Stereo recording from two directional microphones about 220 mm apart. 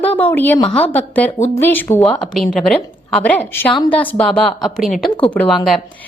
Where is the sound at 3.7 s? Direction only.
20° left (ahead or behind).